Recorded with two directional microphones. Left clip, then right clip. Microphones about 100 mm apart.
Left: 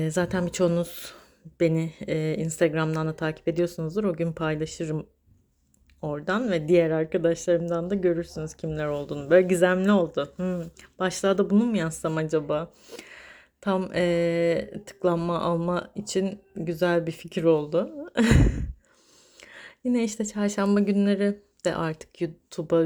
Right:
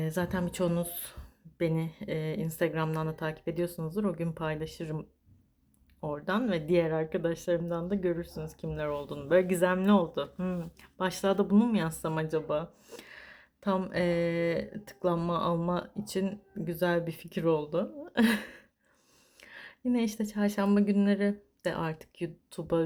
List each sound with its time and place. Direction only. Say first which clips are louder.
0.0 s speech: left 6 dB; 35° left (ahead or behind)